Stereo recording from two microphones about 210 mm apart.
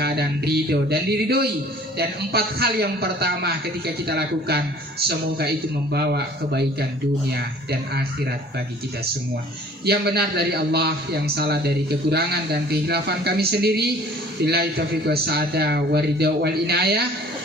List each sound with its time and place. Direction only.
0.0 s a man's voice: 50° right (ahead or behind)
9.8 s a man's voice: 50° right (ahead or behind)